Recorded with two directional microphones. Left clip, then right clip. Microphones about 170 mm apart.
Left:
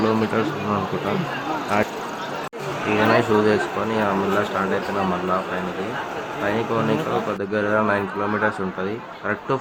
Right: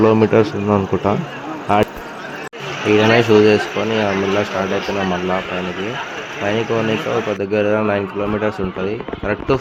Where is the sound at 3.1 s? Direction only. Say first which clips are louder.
Right 6 dB; 35° right (ahead or behind).